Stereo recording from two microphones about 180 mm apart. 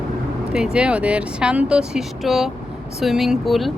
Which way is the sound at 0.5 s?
5° right (ahead or behind).